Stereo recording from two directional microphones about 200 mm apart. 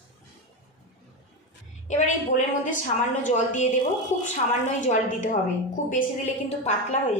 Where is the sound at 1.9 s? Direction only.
35° left (ahead or behind).